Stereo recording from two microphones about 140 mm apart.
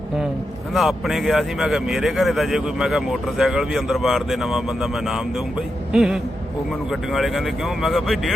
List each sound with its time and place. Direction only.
0.7 s speech: centre (ahead or behind)